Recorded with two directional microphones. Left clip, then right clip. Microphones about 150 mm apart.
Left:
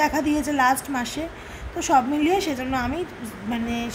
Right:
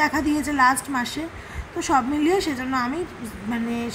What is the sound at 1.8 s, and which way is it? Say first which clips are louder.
Speech: left 1 dB; 10° left (ahead or behind).